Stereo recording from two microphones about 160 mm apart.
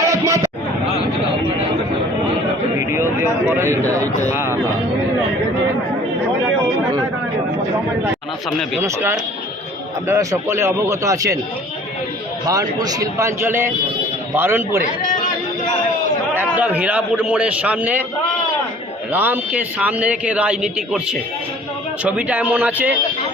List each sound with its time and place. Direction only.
0.3 s chatter: 20° right (ahead or behind)
3.2 s a man's voice: 15° right (ahead or behind)
8.8 s a man's voice: 15° right (ahead or behind)
12.5 s a man's voice: 25° right (ahead or behind)
16.3 s a man's voice: 10° right (ahead or behind)
19.1 s a man's voice: 10° right (ahead or behind)